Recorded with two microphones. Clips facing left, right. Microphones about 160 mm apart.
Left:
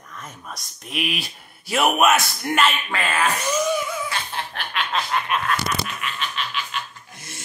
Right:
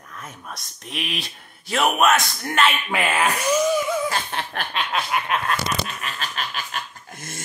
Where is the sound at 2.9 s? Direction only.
15° right (ahead or behind).